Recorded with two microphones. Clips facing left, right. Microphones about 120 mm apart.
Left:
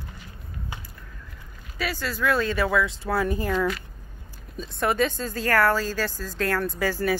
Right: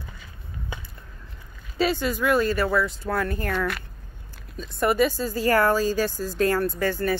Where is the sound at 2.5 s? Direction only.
Centre (ahead or behind).